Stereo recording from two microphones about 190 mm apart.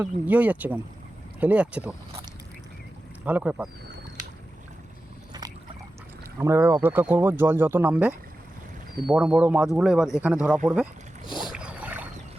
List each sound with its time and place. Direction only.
0.0 s speech: 10° right (ahead or behind)
3.2 s speech: 10° right (ahead or behind)
5.3 s boat: 20° right (ahead or behind)
6.4 s speech: 15° right (ahead or behind)
11.5 s boat: 5° right (ahead or behind)